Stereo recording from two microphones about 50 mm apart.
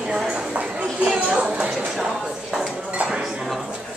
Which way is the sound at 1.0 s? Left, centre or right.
Right.